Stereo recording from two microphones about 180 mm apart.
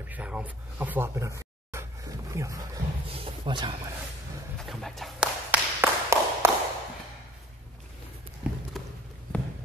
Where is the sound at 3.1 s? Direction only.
30° right (ahead or behind).